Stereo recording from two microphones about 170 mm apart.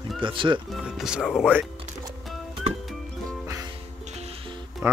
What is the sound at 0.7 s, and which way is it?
Speech, 5° right (ahead or behind).